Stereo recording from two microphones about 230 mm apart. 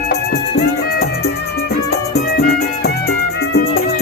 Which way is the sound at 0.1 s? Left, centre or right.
Left.